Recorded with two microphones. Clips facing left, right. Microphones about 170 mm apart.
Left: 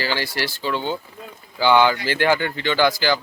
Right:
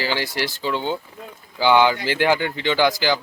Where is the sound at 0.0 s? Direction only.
15° right (ahead or behind).